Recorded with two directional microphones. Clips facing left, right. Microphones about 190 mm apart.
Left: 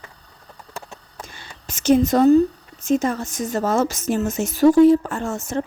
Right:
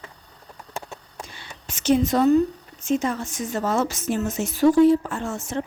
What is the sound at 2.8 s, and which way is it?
Speech, 40° left (ahead or behind).